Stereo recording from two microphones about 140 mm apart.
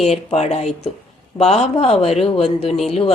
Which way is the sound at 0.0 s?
50° left (ahead or behind).